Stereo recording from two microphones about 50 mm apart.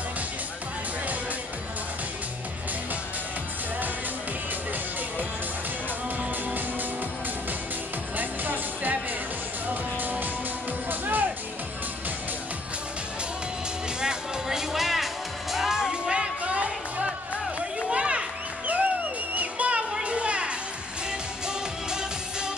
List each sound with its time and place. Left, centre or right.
8.2 s music: right
9.9 s music: right
14.0 s music: centre
17.8 s a sound: right
18.7 s music: right